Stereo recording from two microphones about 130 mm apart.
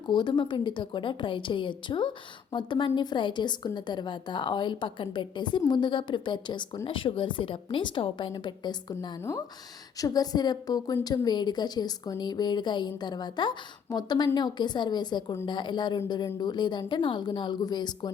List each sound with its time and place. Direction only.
0.1 s a woman's voice: 35° left (ahead or behind)